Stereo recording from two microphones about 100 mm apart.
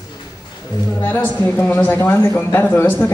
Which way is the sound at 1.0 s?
20° left (ahead or behind).